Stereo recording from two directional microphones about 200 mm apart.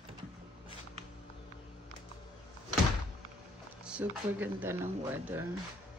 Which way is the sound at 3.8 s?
5° right (ahead or behind).